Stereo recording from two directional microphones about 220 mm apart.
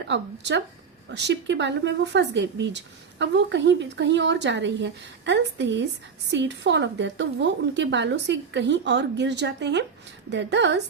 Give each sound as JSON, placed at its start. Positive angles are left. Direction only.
{"t": 0.1, "sound": "speech", "side_deg": -50}